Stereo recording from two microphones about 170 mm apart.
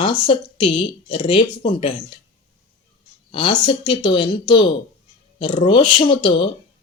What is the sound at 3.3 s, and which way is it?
Speech, 30° left (ahead or behind).